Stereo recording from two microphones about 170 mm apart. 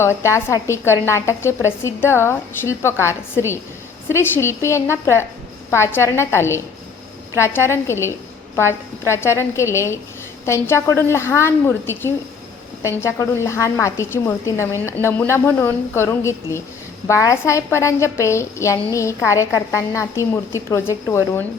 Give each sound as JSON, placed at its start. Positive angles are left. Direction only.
{"t": 0.0, "sound": "a woman's voice", "side_deg": 15}